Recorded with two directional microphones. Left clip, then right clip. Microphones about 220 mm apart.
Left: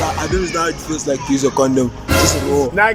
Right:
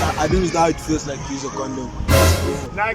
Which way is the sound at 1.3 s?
50° left (ahead or behind).